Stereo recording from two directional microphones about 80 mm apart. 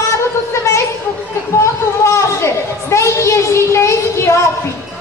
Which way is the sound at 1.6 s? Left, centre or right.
Left.